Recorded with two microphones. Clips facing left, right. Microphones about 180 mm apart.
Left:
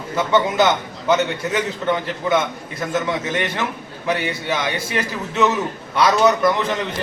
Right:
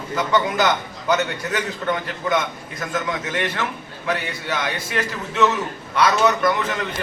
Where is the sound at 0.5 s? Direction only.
20° left (ahead or behind).